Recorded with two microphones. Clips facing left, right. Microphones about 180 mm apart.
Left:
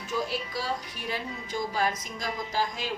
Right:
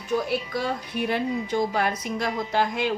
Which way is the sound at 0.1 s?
55° right (ahead or behind).